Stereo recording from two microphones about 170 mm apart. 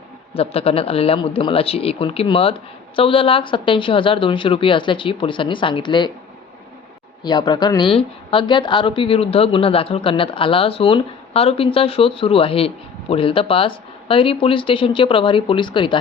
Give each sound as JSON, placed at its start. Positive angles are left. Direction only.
{"t": 0.3, "sound": "a woman's voice", "side_deg": 35}
{"t": 7.3, "sound": "a woman's voice", "side_deg": 25}